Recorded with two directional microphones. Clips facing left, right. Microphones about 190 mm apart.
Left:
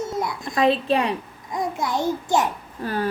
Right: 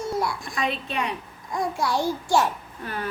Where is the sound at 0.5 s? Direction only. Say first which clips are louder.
Left 10 dB; 35° left (ahead or behind).